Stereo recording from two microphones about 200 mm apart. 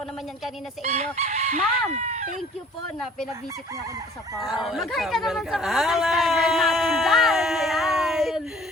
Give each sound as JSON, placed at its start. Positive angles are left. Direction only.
{"t": 0.8, "sound": "chicken", "side_deg": -35}
{"t": 4.4, "sound": "speech", "side_deg": 0}